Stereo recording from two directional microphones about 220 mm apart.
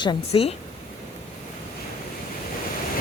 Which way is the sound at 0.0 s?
25° left (ahead or behind).